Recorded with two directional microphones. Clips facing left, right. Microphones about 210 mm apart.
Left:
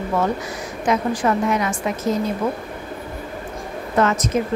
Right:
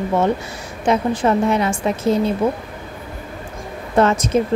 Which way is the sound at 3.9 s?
30° right (ahead or behind).